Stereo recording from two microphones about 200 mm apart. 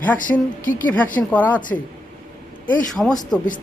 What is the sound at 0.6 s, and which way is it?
Speech, 40° left (ahead or behind).